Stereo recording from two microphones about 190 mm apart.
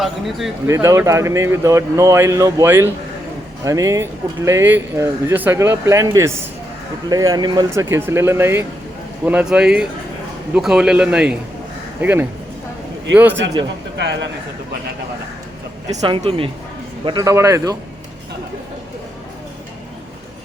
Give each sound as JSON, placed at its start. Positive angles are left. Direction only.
{"t": 0.0, "sound": "speech", "side_deg": 0}
{"t": 0.7, "sound": "speech", "side_deg": -15}
{"t": 14.0, "sound": "a man's voice", "side_deg": -65}
{"t": 16.0, "sound": "speech", "side_deg": -30}